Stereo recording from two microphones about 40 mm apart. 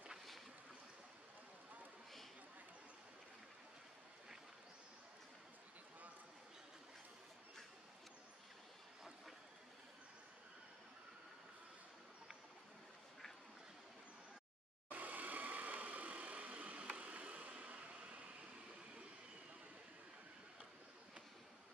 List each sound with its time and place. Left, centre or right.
14.9 s vehicle: right